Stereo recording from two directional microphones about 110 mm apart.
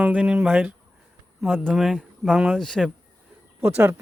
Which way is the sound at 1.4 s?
5° left (ahead or behind).